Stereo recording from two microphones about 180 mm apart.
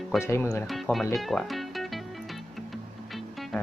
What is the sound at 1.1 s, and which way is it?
Music, centre (ahead or behind).